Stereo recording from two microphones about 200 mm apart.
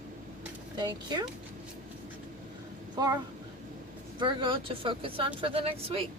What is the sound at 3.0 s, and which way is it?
Speech, 20° right (ahead or behind).